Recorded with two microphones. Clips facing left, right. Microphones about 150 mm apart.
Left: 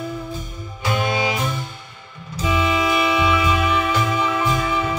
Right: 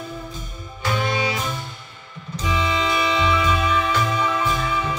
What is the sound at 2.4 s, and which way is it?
Music, 20° left (ahead or behind).